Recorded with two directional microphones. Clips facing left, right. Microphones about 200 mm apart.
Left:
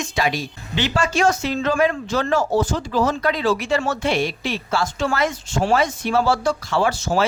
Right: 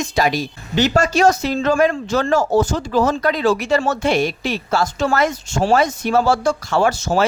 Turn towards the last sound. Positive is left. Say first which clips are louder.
# right 3 dB
turn(degrees=-45)  # may be behind; listen again after turning